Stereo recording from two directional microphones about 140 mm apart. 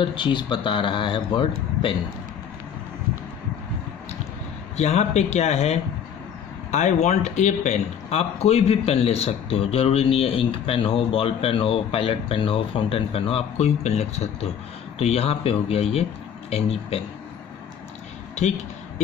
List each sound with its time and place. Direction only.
0.0 s speech: 35° left (ahead or behind)
4.7 s speech: 50° left (ahead or behind)